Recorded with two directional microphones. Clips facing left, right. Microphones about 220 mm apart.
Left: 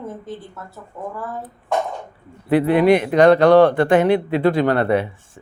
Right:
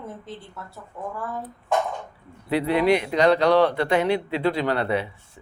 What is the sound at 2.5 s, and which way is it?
A man's voice, 50° left (ahead or behind).